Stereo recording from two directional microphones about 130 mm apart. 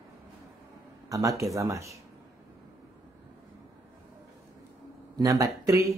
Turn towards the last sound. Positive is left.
turn(degrees=-25)  # may be behind; listen again after turning